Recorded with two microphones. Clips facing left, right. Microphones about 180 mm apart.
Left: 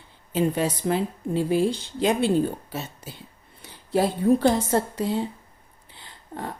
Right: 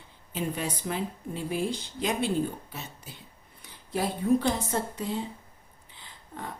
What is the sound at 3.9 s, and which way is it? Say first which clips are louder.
Speech: left 5 dB; 30° left (ahead or behind).